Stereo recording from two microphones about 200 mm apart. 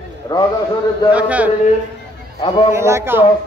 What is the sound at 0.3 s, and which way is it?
Speech, 20° left (ahead or behind).